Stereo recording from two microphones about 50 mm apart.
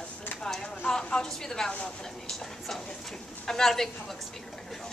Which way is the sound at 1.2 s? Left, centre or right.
Centre.